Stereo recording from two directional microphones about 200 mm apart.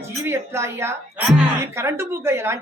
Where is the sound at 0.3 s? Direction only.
10° right (ahead or behind).